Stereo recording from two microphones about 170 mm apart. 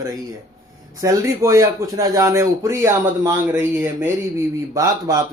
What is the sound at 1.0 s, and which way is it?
Speech, 15° right (ahead or behind).